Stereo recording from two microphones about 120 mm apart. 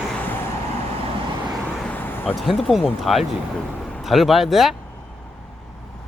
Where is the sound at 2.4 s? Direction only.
Centre (ahead or behind).